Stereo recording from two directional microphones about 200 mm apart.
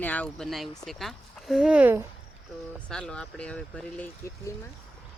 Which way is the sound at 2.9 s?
5° left (ahead or behind).